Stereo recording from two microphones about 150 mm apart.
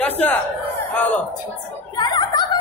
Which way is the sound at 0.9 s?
10° left (ahead or behind).